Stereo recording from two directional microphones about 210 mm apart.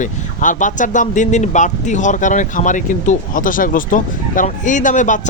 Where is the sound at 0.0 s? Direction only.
40° left (ahead or behind).